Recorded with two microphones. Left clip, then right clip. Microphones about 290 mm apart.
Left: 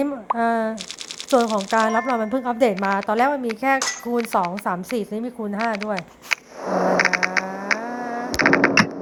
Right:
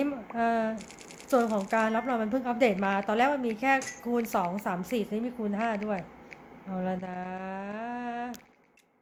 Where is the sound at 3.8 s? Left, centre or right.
Centre.